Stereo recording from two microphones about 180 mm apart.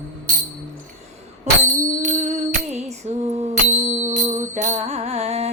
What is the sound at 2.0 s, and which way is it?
Music, 40° right (ahead or behind).